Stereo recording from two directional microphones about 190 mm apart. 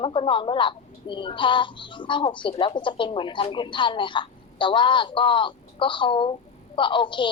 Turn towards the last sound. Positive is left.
turn(degrees=25)  # may be behind; listen again after turning